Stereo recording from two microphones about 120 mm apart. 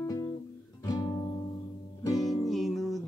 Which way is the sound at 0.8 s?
30° left (ahead or behind).